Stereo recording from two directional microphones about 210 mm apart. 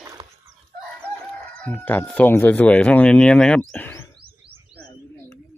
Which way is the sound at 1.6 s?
10° left (ahead or behind).